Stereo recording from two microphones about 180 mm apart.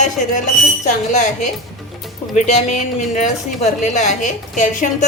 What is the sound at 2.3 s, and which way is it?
A woman's voice, 40° left (ahead or behind).